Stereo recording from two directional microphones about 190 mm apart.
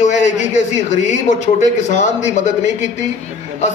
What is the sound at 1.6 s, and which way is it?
Speech, 40° left (ahead or behind).